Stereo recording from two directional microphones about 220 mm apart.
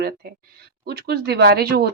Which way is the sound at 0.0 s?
45° right (ahead or behind).